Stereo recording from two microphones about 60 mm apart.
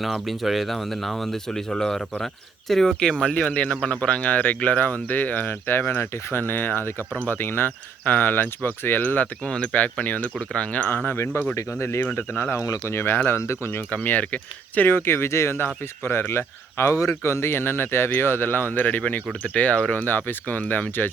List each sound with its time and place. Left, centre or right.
0.0 s speech: centre
3.3 s speech: left
11.5 s speech: left
12.5 s speech: left
12.8 s speech: left
13.9 s speech: left